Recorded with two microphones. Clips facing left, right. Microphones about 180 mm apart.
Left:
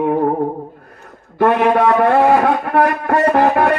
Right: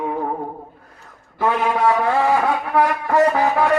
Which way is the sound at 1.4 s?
70° left (ahead or behind).